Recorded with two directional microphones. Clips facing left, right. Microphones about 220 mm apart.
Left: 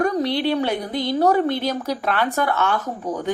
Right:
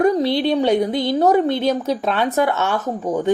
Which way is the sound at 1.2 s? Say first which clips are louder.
Right 2 dB; 20° right (ahead or behind).